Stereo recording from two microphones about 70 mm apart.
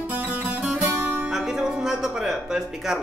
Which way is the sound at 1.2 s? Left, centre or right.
Centre.